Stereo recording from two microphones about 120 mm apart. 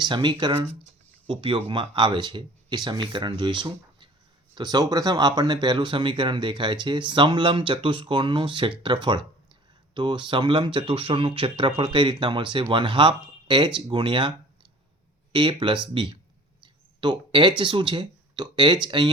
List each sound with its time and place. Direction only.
0.0 s speech: 40° right (ahead or behind)
17.0 s speech: 40° right (ahead or behind)